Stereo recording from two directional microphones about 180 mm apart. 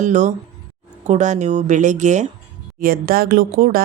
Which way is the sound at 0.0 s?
40° right (ahead or behind).